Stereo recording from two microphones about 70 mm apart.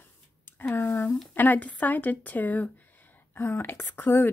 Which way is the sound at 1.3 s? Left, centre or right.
Left.